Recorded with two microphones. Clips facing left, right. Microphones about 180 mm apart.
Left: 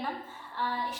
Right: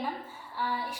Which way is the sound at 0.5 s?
10° right (ahead or behind).